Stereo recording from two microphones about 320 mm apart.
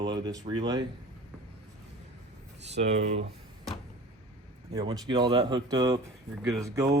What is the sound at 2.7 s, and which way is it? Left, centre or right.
Speech, centre.